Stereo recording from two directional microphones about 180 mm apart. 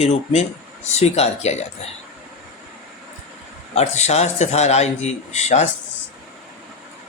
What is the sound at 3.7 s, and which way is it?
A man's voice, 35° left (ahead or behind).